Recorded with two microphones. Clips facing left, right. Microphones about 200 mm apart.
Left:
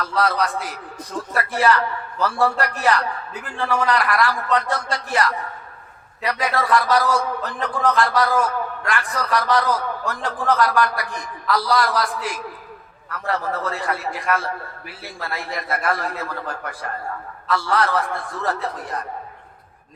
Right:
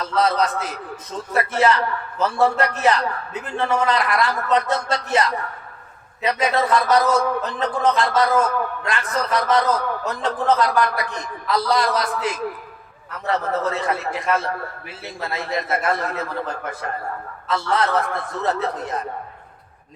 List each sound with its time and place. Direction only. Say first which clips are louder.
0.0 s a man's voice: right 2 dB; 20° right (ahead or behind)